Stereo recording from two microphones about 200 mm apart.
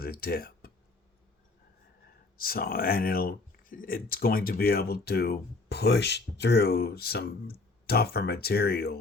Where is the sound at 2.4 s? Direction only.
45° left (ahead or behind).